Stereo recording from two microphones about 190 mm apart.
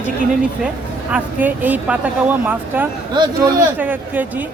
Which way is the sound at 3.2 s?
20° right (ahead or behind).